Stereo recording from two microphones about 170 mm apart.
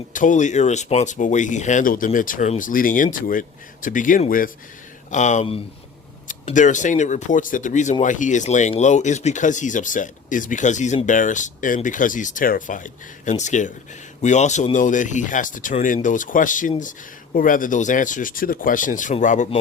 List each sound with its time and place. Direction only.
0.1 s speech: 50° left (ahead or behind)
5.1 s speech: 45° left (ahead or behind)